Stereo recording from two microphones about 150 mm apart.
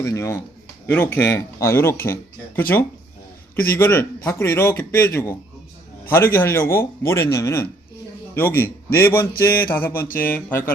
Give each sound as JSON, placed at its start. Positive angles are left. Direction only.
{"t": 0.0, "sound": "a man's voice", "side_deg": 20}
{"t": 3.5, "sound": "a man's voice", "side_deg": 15}